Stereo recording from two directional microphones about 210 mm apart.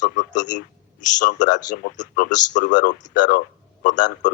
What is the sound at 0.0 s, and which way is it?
A man's voice, 35° left (ahead or behind).